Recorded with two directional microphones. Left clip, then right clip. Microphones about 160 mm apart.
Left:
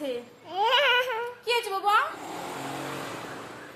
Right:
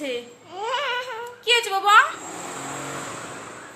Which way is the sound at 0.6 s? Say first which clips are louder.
Left 4 dB; 50° left (ahead or behind).